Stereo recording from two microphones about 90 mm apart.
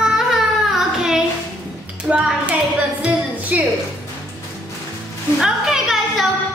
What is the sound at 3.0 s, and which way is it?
Music, 15° right (ahead or behind).